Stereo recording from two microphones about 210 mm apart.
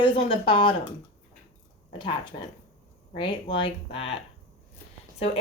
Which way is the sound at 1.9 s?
25° left (ahead or behind).